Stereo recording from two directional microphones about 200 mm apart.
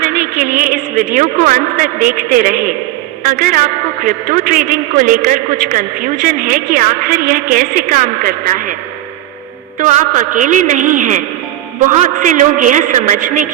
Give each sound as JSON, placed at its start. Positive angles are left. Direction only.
{"t": 0.0, "sound": "a woman's voice", "side_deg": -45}
{"t": 9.7, "sound": "a man's voice", "side_deg": -40}